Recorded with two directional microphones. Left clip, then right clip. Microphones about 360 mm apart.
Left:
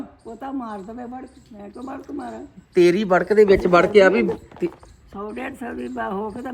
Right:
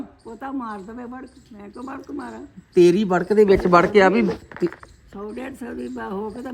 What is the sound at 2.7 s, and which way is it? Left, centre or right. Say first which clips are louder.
Speech: even; centre.